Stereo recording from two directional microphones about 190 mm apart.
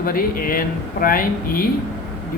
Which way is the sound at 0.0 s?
50° left (ahead or behind).